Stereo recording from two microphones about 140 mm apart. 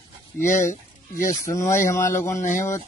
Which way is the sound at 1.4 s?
20° left (ahead or behind).